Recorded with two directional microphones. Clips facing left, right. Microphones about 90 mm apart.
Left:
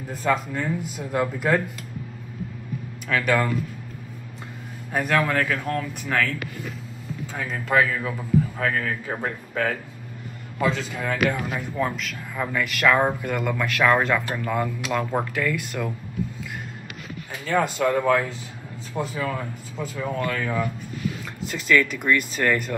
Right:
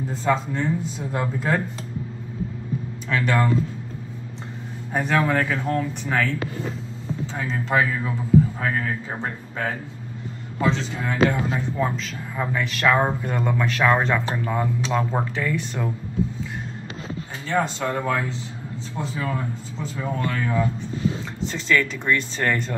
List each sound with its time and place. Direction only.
0.1 s speech: 25° right (ahead or behind)
3.1 s speech: 25° right (ahead or behind)
4.9 s speech: 25° right (ahead or behind)
17.1 s speech: 30° right (ahead or behind)